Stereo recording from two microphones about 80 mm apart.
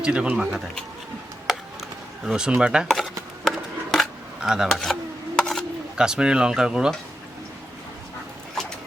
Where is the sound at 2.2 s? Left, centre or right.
Centre.